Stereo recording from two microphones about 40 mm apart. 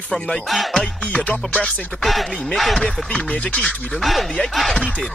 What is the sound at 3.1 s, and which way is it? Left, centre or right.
Music, left.